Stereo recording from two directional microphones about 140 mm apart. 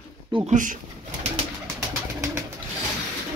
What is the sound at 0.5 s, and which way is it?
Speech, 65° right (ahead or behind).